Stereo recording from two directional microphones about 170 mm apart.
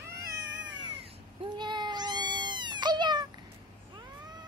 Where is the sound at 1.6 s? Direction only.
25° right (ahead or behind).